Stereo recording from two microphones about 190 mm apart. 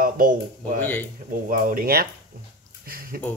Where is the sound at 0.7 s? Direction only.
10° left (ahead or behind).